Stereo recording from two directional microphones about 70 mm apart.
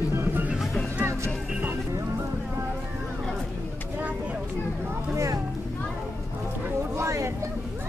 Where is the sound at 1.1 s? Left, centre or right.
Right.